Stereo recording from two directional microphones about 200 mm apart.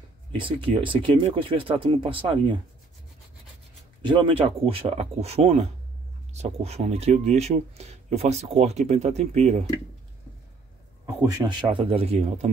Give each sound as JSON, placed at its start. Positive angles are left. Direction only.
{"t": 0.4, "sound": "speech", "side_deg": -25}
{"t": 4.0, "sound": "speech", "side_deg": -25}
{"t": 11.2, "sound": "speech", "side_deg": -25}